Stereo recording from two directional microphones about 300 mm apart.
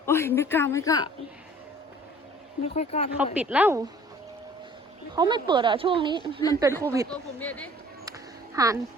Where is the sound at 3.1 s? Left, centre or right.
Centre.